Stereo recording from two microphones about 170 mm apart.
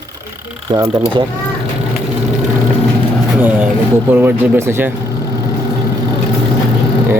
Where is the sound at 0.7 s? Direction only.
20° right (ahead or behind).